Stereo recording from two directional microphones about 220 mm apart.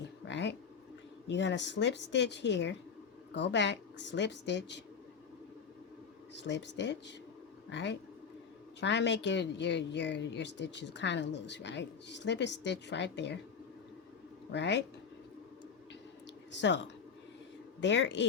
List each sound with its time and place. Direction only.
0.3 s a sound: 55° left (ahead or behind)
1.3 s speech: 55° left (ahead or behind)
6.3 s speech: 55° left (ahead or behind)
14.5 s speech: 50° left (ahead or behind)
16.5 s speech: 55° left (ahead or behind)